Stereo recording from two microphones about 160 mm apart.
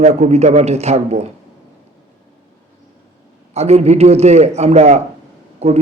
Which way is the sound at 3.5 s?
40° right (ahead or behind).